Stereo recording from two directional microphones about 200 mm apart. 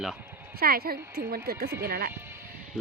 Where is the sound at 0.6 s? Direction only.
50° right (ahead or behind).